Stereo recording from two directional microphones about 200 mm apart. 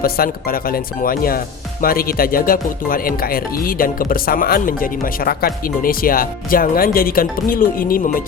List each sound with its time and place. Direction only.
0.0 s speech: 50° left (ahead or behind)